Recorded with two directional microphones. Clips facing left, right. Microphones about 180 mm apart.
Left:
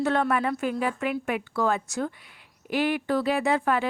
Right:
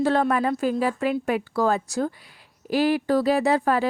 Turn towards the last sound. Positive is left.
turn(degrees=-35)  # may be behind; listen again after turning